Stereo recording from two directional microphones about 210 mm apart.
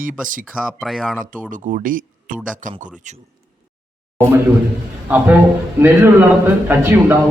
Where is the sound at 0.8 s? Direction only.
Centre (ahead or behind).